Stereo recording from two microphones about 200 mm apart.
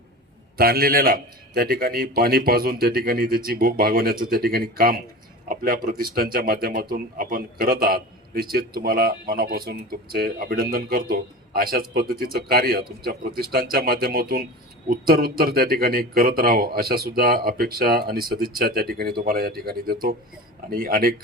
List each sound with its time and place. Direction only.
0.5 s a man's voice: 50° right (ahead or behind)